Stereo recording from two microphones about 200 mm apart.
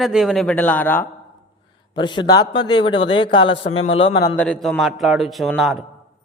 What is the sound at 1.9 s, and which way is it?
A man's voice, 20° left (ahead or behind).